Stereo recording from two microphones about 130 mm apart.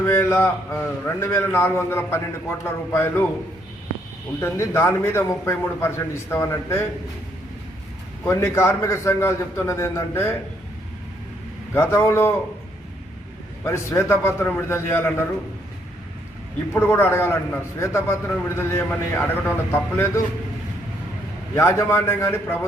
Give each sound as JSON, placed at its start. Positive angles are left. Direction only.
{"t": 0.0, "sound": "a man's voice", "side_deg": 20}
{"t": 4.4, "sound": "a man's voice", "side_deg": 20}
{"t": 8.2, "sound": "a man's voice", "side_deg": 20}
{"t": 11.7, "sound": "a man's voice", "side_deg": 20}
{"t": 13.7, "sound": "a man's voice", "side_deg": 20}
{"t": 16.7, "sound": "a man's voice", "side_deg": 20}
{"t": 21.5, "sound": "a man's voice", "side_deg": 20}